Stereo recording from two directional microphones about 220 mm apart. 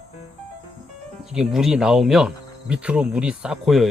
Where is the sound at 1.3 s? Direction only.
5° right (ahead or behind).